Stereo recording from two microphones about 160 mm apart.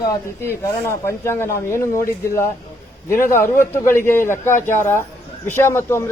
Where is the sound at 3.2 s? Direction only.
15° left (ahead or behind).